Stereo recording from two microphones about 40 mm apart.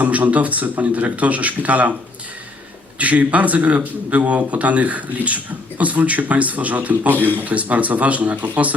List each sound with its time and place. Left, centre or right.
0.0 s a man's voice: right
3.0 s a man's voice: right